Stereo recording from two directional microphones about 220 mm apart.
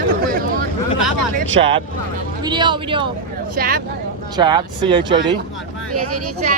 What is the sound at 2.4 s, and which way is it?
Speech, 20° right (ahead or behind).